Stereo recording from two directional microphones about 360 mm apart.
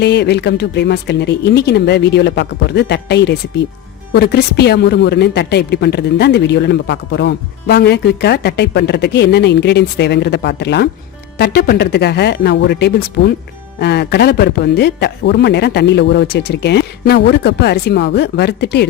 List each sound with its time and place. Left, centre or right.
0.0 s speech: left